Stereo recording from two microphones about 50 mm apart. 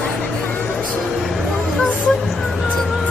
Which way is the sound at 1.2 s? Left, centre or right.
Centre.